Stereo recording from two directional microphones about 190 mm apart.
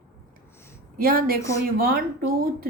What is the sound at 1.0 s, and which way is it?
Speech, 50° right (ahead or behind).